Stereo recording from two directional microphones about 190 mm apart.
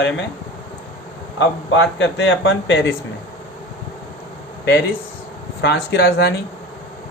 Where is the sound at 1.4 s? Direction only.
70° left (ahead or behind).